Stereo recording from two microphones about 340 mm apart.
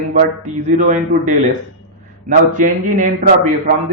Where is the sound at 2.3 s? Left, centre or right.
Right.